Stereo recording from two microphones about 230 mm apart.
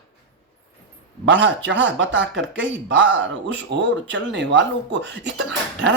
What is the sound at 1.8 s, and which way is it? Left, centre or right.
Speech, right.